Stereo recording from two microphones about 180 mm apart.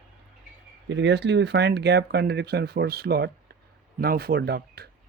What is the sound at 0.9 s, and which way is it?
Speech, 75° right (ahead or behind).